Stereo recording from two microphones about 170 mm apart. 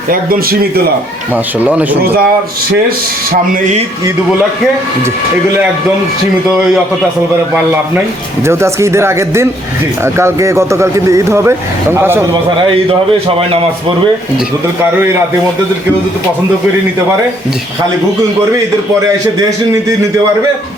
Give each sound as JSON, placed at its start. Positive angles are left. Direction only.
{"t": 0.1, "sound": "a man's voice", "side_deg": -60}
{"t": 1.5, "sound": "speech", "side_deg": -10}
{"t": 3.5, "sound": "speech", "side_deg": -45}
{"t": 8.4, "sound": "speech", "side_deg": -15}
{"t": 12.9, "sound": "a man's voice", "side_deg": -35}
{"t": 19.4, "sound": "speech", "side_deg": -20}